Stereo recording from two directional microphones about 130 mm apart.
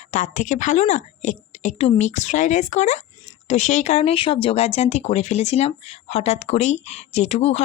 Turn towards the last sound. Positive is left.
turn(degrees=55)  # may be behind; listen again after turning